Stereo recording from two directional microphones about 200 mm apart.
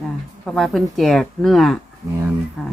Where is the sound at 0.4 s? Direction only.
Centre (ahead or behind).